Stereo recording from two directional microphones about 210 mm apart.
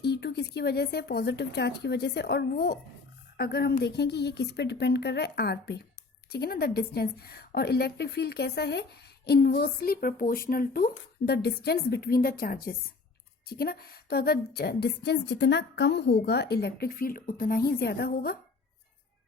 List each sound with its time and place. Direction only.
0.0 s a woman's voice: 50° left (ahead or behind)